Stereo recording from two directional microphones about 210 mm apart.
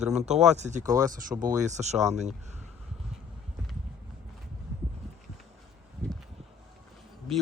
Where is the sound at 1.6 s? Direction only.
35° right (ahead or behind).